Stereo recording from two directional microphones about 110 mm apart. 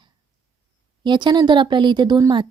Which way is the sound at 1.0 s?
45° right (ahead or behind).